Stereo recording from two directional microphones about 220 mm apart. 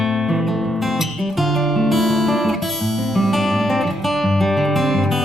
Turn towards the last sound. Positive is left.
turn(degrees=0)  # may be behind; listen again after turning